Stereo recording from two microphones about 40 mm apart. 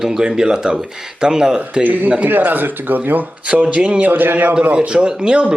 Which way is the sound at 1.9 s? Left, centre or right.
Right.